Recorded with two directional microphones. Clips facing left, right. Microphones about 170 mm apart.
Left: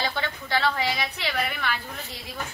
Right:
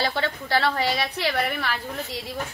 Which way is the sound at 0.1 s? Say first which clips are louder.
Right 3 dB; 30° right (ahead or behind).